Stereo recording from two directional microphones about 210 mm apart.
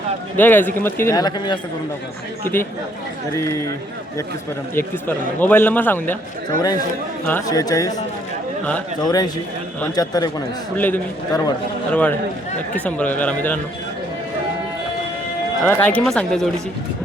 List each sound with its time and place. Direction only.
0.3 s a man's voice: 10° left (ahead or behind)
3.3 s a man's voice: 15° left (ahead or behind)
4.7 s a man's voice: 10° left (ahead or behind)
7.3 s a man's voice: 15° left (ahead or behind)
15.6 s a man's voice: 10° left (ahead or behind)